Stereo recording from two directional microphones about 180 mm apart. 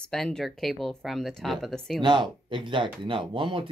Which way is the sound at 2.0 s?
25° right (ahead or behind).